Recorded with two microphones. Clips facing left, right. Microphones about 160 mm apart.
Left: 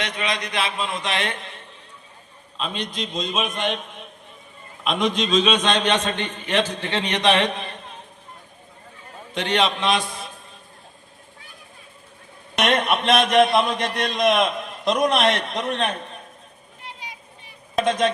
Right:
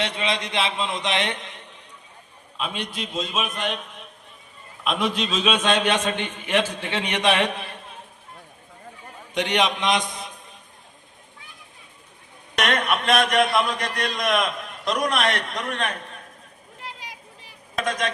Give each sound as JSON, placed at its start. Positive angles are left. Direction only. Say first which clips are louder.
{"t": 0.0, "sound": "a man's voice", "louder": "right 1 dB", "side_deg": -25}
{"t": 9.3, "sound": "a man's voice", "louder": "left 1 dB", "side_deg": -15}
{"t": 12.5, "sound": "a man's voice", "louder": "left 3 dB", "side_deg": 25}
{"t": 16.8, "sound": "vehicle", "louder": "even", "side_deg": -90}
{"t": 17.7, "sound": "a man's voice", "louder": "left 6 dB", "side_deg": 25}